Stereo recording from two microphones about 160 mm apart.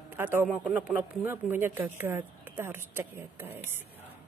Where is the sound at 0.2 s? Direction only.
15° right (ahead or behind).